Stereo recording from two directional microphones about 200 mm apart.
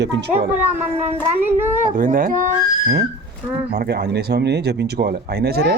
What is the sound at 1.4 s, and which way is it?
Speech, 10° right (ahead or behind).